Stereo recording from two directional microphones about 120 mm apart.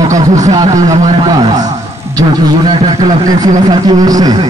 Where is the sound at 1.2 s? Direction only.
30° right (ahead or behind).